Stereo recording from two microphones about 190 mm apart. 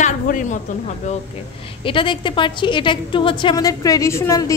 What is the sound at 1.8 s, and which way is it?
A woman's voice, 25° left (ahead or behind).